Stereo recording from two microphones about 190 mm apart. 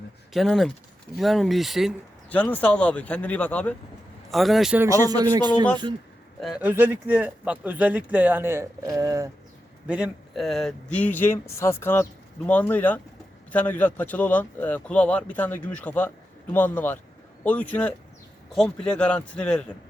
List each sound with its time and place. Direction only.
0.3 s speech: centre (ahead or behind)
4.9 s a man's voice: 20° right (ahead or behind)
6.4 s speech: 5° right (ahead or behind)
9.8 s speech: 5° right (ahead or behind)